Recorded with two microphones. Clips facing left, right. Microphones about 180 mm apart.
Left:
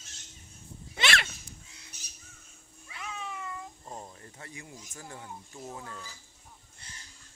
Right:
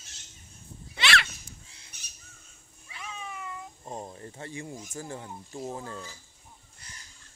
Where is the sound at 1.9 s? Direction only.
60° right (ahead or behind).